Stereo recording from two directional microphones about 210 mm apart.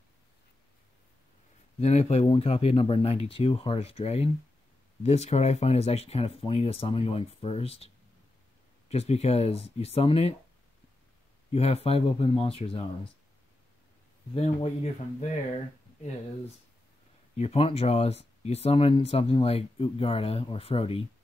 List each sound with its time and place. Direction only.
1.8 s speech: 30° left (ahead or behind)
11.5 s speech: 30° left (ahead or behind)
14.3 s speech: 30° left (ahead or behind)
17.4 s speech: 30° left (ahead or behind)